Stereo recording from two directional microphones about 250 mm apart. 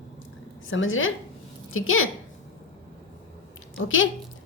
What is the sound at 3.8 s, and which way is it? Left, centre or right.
Speech, left.